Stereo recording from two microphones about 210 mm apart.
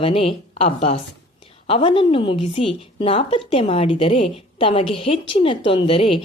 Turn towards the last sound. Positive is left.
turn(degrees=25)  # may be behind; listen again after turning